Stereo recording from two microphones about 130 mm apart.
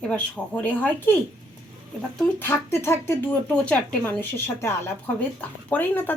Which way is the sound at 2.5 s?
20° left (ahead or behind).